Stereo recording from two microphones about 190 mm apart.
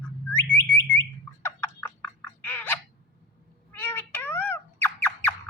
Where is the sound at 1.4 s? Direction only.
10° left (ahead or behind).